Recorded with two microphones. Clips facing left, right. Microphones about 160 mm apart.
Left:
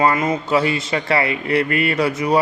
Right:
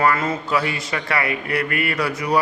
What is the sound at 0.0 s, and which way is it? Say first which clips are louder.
A man's voice: left 2 dB; 20° left (ahead or behind).